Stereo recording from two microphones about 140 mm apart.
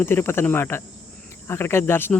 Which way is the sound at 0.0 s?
15° left (ahead or behind).